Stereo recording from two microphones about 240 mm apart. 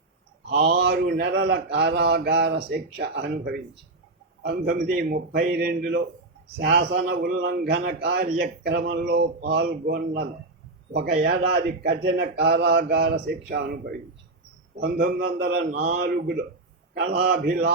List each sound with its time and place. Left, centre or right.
0.5 s a man's voice: right
14.8 s a man's voice: right